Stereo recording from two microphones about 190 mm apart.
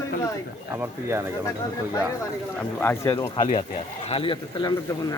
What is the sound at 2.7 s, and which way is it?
Speech, 10° left (ahead or behind).